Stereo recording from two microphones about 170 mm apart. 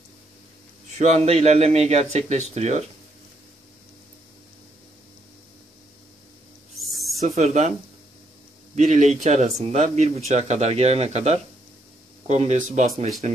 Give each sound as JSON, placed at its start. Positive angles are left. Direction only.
{"t": 0.8, "sound": "speech", "side_deg": -45}
{"t": 6.8, "sound": "owl", "side_deg": 0}
{"t": 7.2, "sound": "speech", "side_deg": -40}
{"t": 8.7, "sound": "speech", "side_deg": -45}